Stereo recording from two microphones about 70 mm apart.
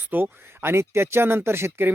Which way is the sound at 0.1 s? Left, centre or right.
Right.